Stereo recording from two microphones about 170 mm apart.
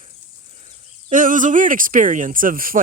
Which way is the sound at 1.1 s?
50° right (ahead or behind).